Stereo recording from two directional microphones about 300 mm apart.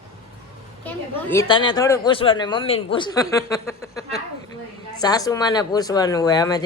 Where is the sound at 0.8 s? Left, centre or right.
Centre.